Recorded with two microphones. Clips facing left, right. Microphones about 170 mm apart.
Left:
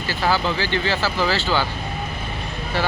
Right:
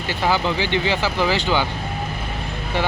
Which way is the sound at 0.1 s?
20° right (ahead or behind).